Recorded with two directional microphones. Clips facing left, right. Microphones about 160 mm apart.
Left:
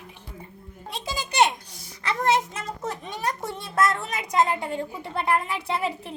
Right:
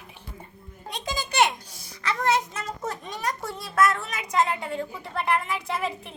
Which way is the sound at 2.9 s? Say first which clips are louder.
Left 2 dB; 25° left (ahead or behind).